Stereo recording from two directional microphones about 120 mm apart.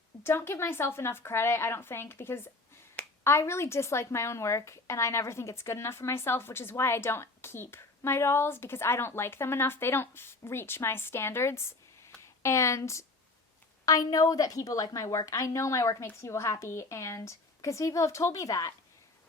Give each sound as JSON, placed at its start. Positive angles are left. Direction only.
{"t": 0.2, "sound": "a woman's voice", "side_deg": 20}